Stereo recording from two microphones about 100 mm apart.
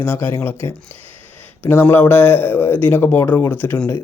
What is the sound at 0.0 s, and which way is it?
A man's voice, 25° left (ahead or behind).